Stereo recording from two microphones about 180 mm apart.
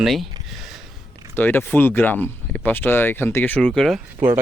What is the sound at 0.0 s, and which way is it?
Speech, centre (ahead or behind).